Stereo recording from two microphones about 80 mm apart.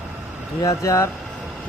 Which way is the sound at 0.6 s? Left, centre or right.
Left.